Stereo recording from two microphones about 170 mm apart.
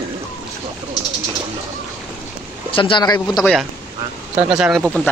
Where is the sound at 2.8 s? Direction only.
30° left (ahead or behind).